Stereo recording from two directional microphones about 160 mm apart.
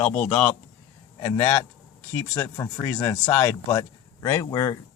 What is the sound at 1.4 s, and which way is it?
Speech, 10° left (ahead or behind).